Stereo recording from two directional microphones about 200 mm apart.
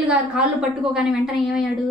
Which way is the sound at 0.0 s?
5° right (ahead or behind).